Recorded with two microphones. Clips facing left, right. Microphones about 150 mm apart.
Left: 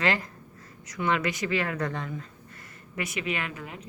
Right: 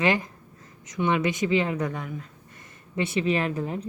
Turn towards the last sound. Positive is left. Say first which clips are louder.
# right 8 dB
turn(degrees=-35)  # may be behind; listen again after turning